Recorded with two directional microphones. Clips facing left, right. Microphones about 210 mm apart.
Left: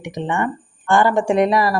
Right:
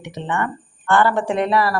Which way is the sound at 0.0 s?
15° left (ahead or behind).